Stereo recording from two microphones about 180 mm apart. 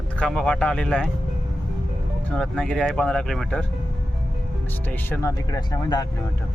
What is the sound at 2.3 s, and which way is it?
Speech, 5° left (ahead or behind).